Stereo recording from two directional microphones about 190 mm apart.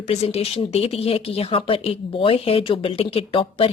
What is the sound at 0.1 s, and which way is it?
Speech, 35° left (ahead or behind).